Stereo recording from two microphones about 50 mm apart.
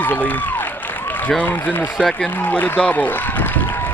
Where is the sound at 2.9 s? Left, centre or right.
Left.